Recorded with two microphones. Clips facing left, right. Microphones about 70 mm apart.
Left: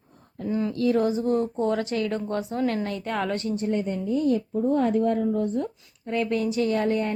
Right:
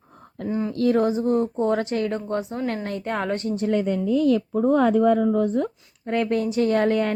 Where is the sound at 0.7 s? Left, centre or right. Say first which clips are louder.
Right 3 dB; right.